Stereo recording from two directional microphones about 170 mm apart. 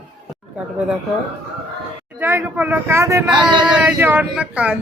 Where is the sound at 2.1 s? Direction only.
10° right (ahead or behind).